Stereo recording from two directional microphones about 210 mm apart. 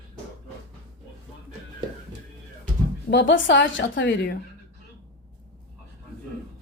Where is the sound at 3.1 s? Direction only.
55° left (ahead or behind).